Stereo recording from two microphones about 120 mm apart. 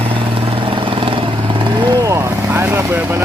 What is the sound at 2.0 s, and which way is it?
Vehicle, 25° right (ahead or behind).